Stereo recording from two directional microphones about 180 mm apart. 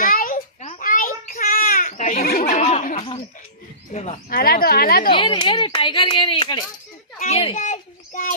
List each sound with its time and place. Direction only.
0.0 s a sound: 50° left (ahead or behind)
1.9 s a sound: 40° left (ahead or behind)
2.2 s laughter: 50° left (ahead or behind); by 3.2 s 35° left (ahead or behind)
3.9 s speech: 35° left (ahead or behind)
4.3 s a woman's voice: 55° left (ahead or behind)
5.1 s speech: 30° left (ahead or behind)
7.2 s children playing: 35° left (ahead or behind)